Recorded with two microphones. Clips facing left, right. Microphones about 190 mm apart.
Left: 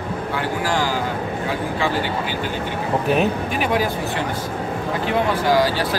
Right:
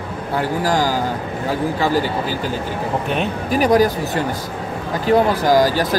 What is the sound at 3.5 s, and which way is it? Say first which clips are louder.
Speech: right 6 dB; 40° right (ahead or behind).